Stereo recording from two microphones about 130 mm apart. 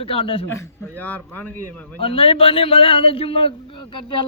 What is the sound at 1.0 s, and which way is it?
Speech, 15° left (ahead or behind).